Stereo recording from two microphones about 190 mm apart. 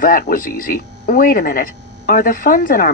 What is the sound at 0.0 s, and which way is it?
Speech, 45° left (ahead or behind).